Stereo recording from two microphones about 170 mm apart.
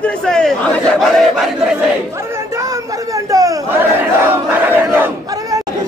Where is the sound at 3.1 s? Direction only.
20° right (ahead or behind).